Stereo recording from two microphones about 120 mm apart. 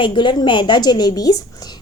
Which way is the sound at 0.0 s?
40° left (ahead or behind).